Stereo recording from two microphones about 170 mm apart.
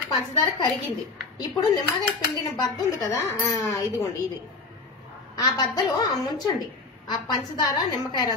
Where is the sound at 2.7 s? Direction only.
20° left (ahead or behind).